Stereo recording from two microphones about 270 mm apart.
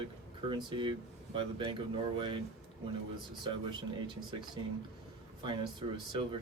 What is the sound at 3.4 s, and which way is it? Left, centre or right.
Speech, centre.